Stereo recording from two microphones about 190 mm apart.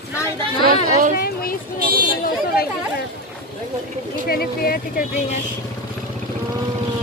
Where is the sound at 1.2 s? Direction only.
50° left (ahead or behind).